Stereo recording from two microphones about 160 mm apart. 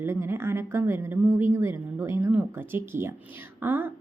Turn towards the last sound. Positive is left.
turn(degrees=-15)  # may be behind; listen again after turning